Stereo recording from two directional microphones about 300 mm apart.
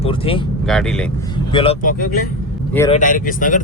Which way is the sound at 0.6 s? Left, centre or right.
Centre.